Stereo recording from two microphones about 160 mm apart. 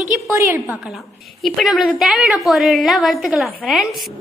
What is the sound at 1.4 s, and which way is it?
A woman's voice, centre (ahead or behind).